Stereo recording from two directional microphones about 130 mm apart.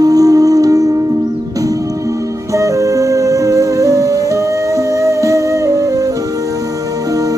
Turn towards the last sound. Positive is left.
turn(degrees=-25)  # may be behind; listen again after turning